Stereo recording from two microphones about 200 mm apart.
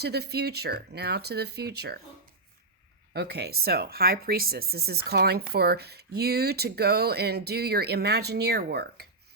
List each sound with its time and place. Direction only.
0.0 s speech: 55° right (ahead or behind)
3.1 s speech: 55° right (ahead or behind)